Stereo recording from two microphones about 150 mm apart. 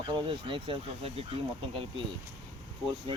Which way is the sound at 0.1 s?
35° right (ahead or behind).